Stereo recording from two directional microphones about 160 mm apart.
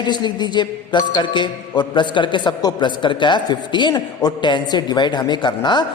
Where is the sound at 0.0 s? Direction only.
25° left (ahead or behind).